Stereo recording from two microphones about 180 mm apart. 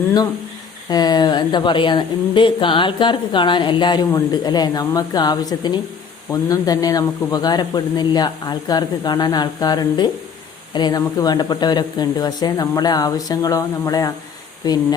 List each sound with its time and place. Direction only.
0.9 s a woman's voice: 20° left (ahead or behind)